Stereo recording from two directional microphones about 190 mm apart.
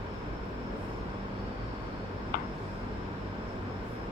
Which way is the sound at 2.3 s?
50° left (ahead or behind).